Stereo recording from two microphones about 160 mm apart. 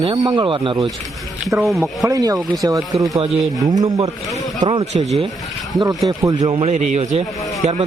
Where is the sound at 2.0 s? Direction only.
20° right (ahead or behind).